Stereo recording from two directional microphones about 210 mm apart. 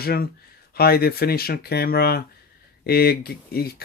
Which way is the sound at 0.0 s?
45° left (ahead or behind).